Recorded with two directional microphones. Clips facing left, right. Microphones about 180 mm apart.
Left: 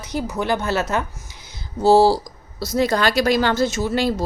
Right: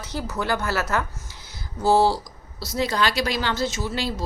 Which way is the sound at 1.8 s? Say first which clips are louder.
Left 5 dB; 30° left (ahead or behind).